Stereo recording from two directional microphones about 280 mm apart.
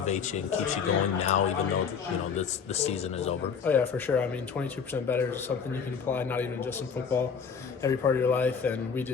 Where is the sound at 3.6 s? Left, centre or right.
Centre.